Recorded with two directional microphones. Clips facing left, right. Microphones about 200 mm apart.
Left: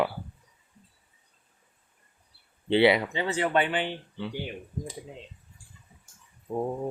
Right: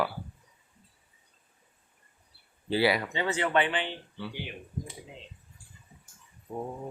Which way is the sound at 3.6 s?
50° left (ahead or behind).